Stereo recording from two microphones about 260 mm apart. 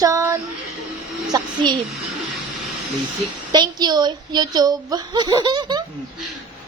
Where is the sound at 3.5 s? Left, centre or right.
Centre.